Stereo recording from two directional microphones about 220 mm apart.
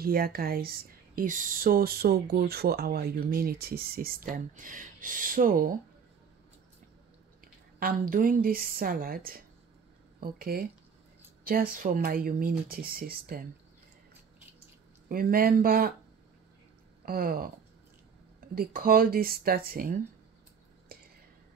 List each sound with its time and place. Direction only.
0.0 s speech: 40° right (ahead or behind)
7.8 s speech: 40° right (ahead or behind)
15.0 s speech: 40° right (ahead or behind)
17.0 s speech: 40° right (ahead or behind)
18.5 s speech: 40° right (ahead or behind)
20.9 s a sound: 40° right (ahead or behind)